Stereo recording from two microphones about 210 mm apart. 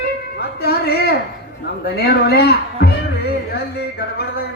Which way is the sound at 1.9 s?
50° left (ahead or behind).